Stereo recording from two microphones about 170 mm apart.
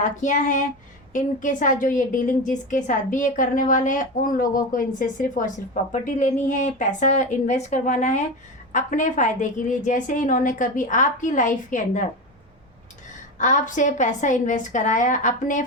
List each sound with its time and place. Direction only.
0.0 s a woman's voice: 45° left (ahead or behind)
13.4 s a woman's voice: 45° left (ahead or behind)